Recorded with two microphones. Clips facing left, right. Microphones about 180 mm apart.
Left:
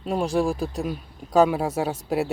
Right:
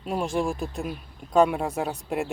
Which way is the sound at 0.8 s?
Centre (ahead or behind).